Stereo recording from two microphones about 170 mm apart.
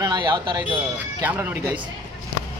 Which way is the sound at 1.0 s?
10° right (ahead or behind).